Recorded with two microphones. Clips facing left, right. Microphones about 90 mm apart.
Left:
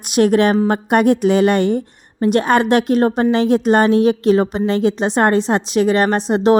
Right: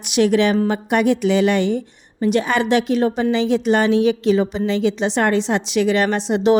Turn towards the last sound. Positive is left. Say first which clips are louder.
# left 2 dB
turn(degrees=40)  # may be behind; listen again after turning